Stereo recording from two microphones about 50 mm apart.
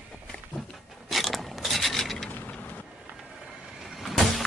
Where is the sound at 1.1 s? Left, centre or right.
Centre.